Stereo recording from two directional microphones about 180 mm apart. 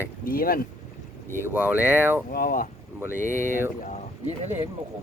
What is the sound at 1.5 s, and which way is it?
Speech, 5° right (ahead or behind).